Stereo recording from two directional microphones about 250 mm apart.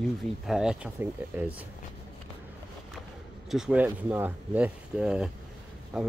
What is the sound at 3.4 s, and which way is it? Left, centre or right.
Speech, centre.